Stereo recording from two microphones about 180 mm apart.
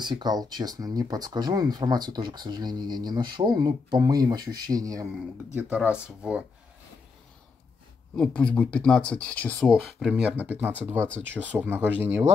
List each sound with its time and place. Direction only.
0.0 s speech: 25° right (ahead or behind)
5.5 s speech: 5° right (ahead or behind)
8.2 s speech: 5° left (ahead or behind); by 12.3 s 10° right (ahead or behind)